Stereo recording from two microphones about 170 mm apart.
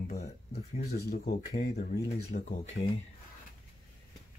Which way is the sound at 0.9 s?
65° left (ahead or behind).